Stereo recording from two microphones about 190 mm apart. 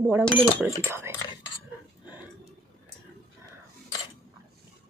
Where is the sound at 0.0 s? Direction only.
10° right (ahead or behind).